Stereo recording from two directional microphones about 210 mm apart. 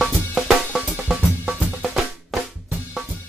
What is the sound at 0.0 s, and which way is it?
Drum, centre (ahead or behind).